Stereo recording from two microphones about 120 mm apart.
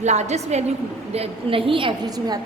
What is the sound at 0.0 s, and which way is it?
Speech, 70° right (ahead or behind).